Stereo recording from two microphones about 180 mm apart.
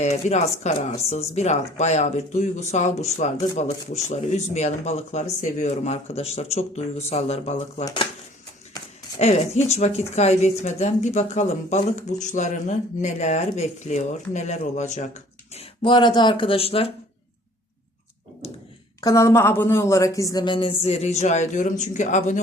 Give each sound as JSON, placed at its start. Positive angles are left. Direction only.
{"t": 0.0, "sound": "speech", "side_deg": 40}
{"t": 9.1, "sound": "speech", "side_deg": 40}
{"t": 15.5, "sound": "speech", "side_deg": 25}
{"t": 19.0, "sound": "speech", "side_deg": 15}